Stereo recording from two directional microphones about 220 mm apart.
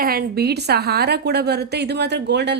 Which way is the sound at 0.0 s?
45° right (ahead or behind).